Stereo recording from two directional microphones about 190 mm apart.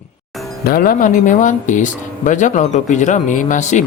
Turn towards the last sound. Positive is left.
turn(degrees=40)  # may be behind; listen again after turning